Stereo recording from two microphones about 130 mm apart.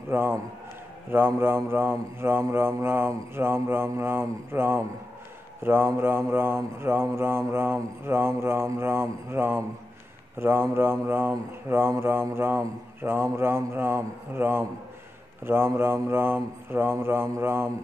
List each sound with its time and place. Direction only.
0.1 s mantra: 15° right (ahead or behind)
5.6 s speech: 15° right (ahead or behind)